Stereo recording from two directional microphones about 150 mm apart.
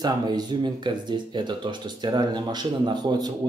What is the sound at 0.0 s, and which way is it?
Speech, 30° right (ahead or behind).